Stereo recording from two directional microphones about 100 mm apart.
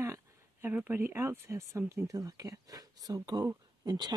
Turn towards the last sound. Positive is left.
turn(degrees=-45)  # may be behind; listen again after turning